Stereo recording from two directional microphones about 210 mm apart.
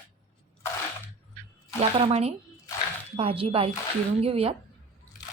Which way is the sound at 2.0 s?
30° right (ahead or behind).